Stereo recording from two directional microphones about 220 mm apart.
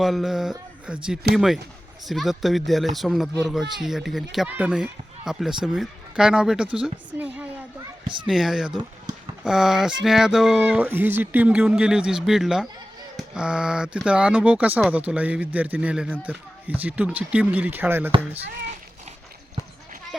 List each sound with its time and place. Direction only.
0.0 s speech: centre (ahead or behind)
8.0 s speech: 20° right (ahead or behind)
8.3 s speech: centre (ahead or behind)